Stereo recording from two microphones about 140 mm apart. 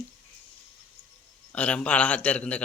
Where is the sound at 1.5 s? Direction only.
10° left (ahead or behind).